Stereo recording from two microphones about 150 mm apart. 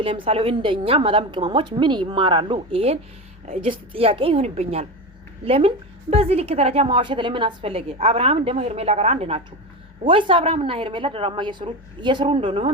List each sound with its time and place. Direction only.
0.0 s a woman's voice: 40° right (ahead or behind)